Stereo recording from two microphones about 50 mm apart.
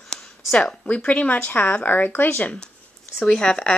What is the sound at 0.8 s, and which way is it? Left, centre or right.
Speech, left.